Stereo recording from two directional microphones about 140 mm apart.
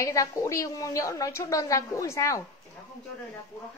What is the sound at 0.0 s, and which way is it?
A woman's voice, 20° left (ahead or behind).